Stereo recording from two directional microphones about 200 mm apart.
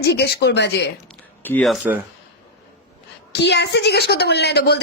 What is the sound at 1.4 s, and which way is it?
Speech, 5° left (ahead or behind).